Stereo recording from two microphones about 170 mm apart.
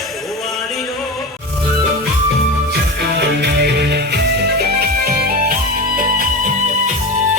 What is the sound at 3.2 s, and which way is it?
Music, 75° right (ahead or behind).